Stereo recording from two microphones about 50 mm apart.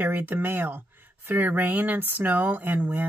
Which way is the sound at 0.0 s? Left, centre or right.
Right.